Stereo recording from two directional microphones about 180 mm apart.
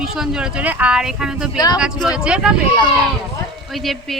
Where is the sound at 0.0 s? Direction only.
5° right (ahead or behind).